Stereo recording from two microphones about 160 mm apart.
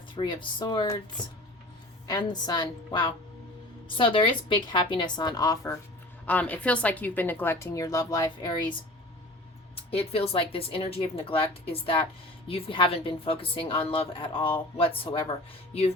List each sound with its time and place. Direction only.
0.2 s a woman's voice: 30° left (ahead or behind)
2.0 s a woman's voice: 25° left (ahead or behind)
6.2 s a woman's voice: 10° left (ahead or behind); by 8.5 s 25° left (ahead or behind)
9.9 s speech: 40° left (ahead or behind)